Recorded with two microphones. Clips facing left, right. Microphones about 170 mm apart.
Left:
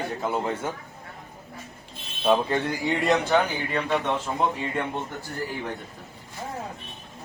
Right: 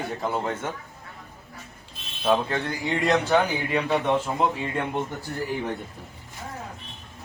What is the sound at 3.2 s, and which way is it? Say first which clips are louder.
A man's voice: right 1 dB; 5° right (ahead or behind).